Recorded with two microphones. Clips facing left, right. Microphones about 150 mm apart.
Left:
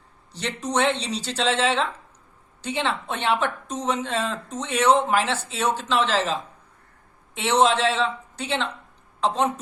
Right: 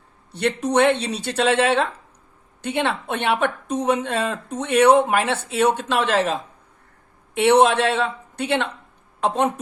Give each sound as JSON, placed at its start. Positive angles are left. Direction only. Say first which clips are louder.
{"t": 0.3, "sound": "speech", "louder": "right 7 dB", "side_deg": -60}